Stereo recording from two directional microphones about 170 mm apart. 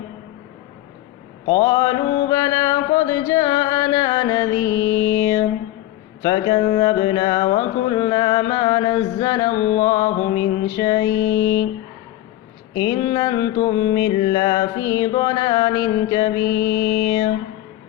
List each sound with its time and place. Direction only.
1.5 s mantra: 25° left (ahead or behind)
6.2 s music: 25° left (ahead or behind)
12.7 s music: 25° left (ahead or behind)